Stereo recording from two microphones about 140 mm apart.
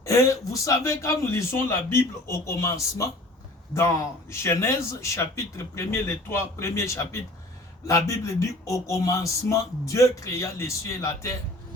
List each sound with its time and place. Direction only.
0.0 s speech: 20° left (ahead or behind)